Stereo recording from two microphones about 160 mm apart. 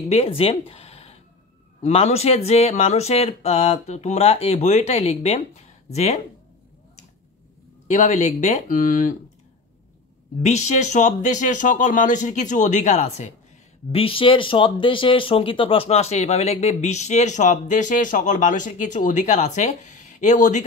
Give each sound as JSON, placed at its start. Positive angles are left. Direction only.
{"t": 0.1, "sound": "speech", "side_deg": 35}
{"t": 7.9, "sound": "speech", "side_deg": 45}
{"t": 10.4, "sound": "speech", "side_deg": 45}